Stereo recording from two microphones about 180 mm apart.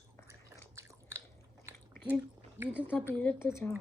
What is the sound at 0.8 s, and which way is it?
Chewing, 15° right (ahead or behind).